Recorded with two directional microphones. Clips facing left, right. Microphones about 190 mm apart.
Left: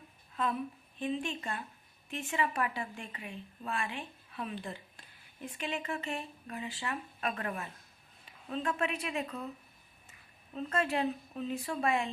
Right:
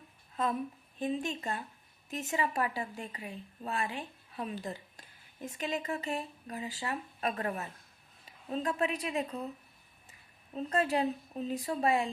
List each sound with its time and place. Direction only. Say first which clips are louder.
0.3 s a woman's voice: right 1 dB; 40° right (ahead or behind)